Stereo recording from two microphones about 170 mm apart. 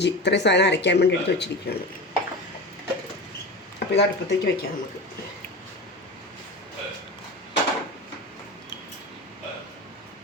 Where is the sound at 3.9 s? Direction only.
80° left.